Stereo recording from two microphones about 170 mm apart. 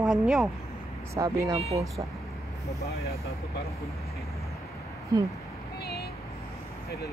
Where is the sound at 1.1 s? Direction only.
20° right (ahead or behind).